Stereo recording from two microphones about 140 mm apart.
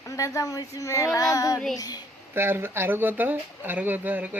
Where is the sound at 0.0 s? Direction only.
25° left (ahead or behind).